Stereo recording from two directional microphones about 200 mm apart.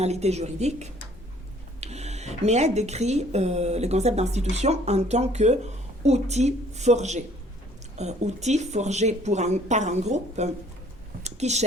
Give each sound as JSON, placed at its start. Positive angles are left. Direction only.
{"t": 0.0, "sound": "speech", "side_deg": -35}